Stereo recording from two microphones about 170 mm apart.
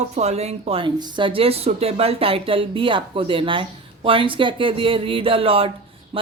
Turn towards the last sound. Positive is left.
turn(degrees=-35)  # may be behind; listen again after turning